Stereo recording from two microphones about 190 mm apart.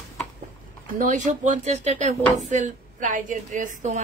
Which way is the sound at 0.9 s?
40° right (ahead or behind).